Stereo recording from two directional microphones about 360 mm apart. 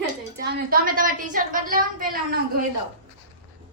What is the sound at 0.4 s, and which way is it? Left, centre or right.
A woman's voice, right.